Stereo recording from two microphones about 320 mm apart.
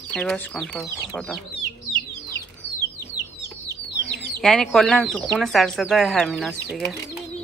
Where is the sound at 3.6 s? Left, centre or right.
Left.